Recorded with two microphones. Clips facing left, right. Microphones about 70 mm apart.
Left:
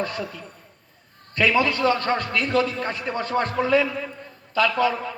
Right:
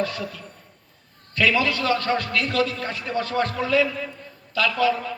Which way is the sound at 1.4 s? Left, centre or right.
Left.